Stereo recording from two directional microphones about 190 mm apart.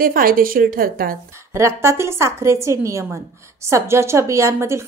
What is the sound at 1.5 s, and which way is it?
A woman's voice, 15° right (ahead or behind).